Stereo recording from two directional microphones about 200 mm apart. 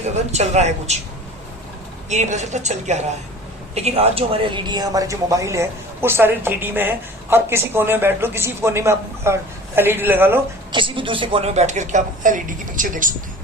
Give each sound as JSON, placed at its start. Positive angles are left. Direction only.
{"t": 0.3, "sound": "speech", "side_deg": -35}
{"t": 2.0, "sound": "a woman's voice", "side_deg": -35}
{"t": 10.7, "sound": "speech", "side_deg": -25}